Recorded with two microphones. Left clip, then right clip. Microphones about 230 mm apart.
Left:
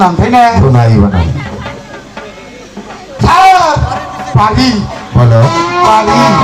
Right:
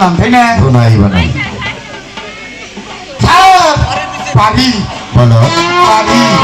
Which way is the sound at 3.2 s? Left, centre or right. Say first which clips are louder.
Even; right.